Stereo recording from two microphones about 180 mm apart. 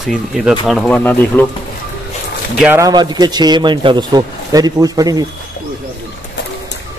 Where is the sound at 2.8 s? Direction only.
25° right (ahead or behind).